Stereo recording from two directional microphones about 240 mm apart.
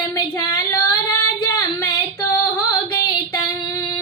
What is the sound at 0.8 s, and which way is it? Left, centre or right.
Child singing, left.